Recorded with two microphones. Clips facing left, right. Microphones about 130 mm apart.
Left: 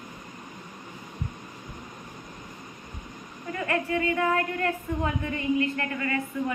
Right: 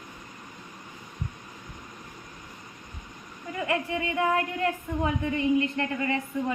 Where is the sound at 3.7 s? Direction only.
15° right (ahead or behind).